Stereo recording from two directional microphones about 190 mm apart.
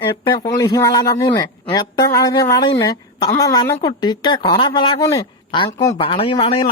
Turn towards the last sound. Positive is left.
turn(degrees=30)  # may be behind; listen again after turning